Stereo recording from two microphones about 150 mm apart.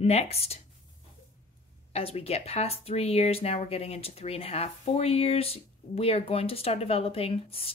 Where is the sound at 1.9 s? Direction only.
40° left (ahead or behind).